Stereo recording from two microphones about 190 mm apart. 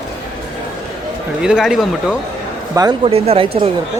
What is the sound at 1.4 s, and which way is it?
Speech, 5° right (ahead or behind).